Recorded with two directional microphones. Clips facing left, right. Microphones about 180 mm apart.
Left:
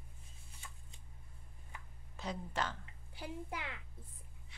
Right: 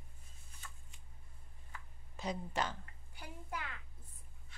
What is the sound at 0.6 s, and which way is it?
Shuffling cards, 15° left (ahead or behind).